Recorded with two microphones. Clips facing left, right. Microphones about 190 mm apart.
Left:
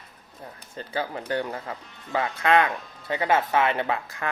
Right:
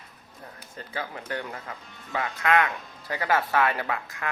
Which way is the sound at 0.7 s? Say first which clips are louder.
Left 5 dB; 30° left (ahead or behind).